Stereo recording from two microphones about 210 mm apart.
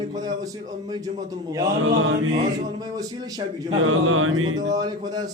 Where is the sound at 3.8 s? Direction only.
80° right.